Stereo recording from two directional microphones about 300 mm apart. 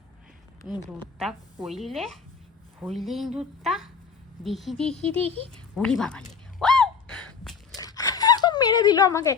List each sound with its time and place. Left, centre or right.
1.2 s a woman's voice: centre
5.0 s speech: centre
5.7 s a woman's voice: centre
6.6 s gasp: centre
7.8 s a sound: centre